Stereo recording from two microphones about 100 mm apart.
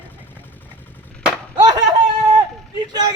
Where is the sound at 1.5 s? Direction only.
45° right (ahead or behind).